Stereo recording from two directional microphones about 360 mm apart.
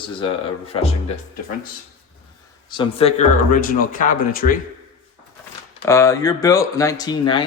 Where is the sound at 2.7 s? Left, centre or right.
Centre.